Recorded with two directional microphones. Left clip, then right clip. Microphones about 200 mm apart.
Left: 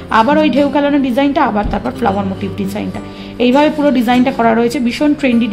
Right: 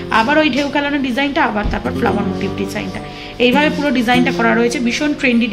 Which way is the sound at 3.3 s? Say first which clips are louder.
Left 2 dB; 50° left (ahead or behind).